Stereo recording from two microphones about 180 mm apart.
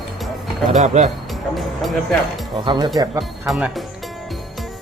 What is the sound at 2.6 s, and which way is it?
Speech, 25° right (ahead or behind).